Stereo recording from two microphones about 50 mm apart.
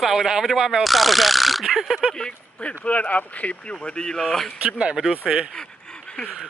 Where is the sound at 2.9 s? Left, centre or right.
Left.